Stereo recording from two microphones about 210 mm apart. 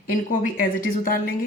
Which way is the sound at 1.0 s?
40° left (ahead or behind).